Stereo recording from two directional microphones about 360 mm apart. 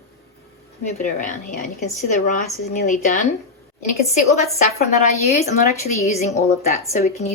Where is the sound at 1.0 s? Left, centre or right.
Left.